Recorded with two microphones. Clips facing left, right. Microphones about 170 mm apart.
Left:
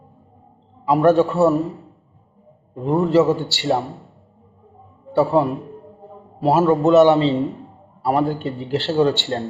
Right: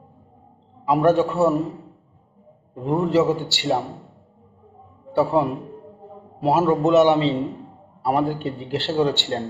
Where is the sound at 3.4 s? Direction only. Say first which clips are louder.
Left 2 dB; 20° right (ahead or behind).